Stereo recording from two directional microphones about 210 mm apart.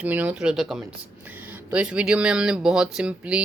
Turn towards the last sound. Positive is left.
turn(degrees=-5)  # may be behind; listen again after turning